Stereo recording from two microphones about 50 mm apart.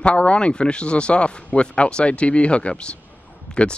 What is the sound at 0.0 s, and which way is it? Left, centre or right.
Speech, left.